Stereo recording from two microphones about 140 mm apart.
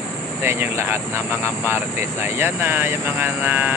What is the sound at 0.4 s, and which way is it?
Speech, 15° right (ahead or behind).